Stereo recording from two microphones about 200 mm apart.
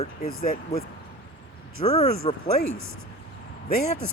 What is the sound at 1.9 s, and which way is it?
Speech, 30° left (ahead or behind).